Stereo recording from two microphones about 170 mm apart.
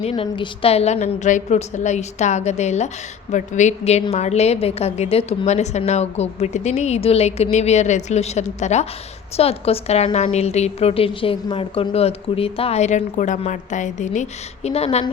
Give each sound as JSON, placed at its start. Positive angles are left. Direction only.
{"t": 0.0, "sound": "a woman's voice", "side_deg": 35}